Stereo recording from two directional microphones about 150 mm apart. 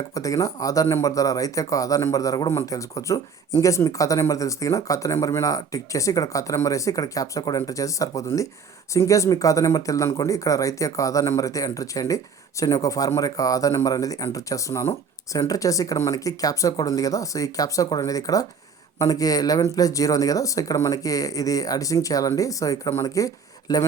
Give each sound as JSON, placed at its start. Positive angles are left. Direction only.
{"t": 0.1, "sound": "speech", "side_deg": 25}